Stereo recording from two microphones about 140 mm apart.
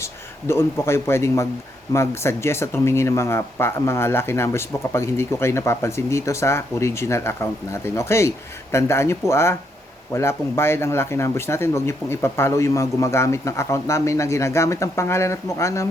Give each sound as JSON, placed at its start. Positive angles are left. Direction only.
{"t": 0.0, "sound": "a man's voice", "side_deg": 20}